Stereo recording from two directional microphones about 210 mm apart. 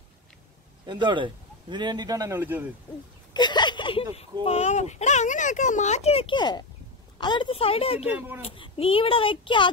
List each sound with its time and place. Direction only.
0.8 s a man's voice: 20° right (ahead or behind)
3.3 s a sound: 20° left (ahead or behind)
4.5 s a child's voice: 30° left (ahead or behind)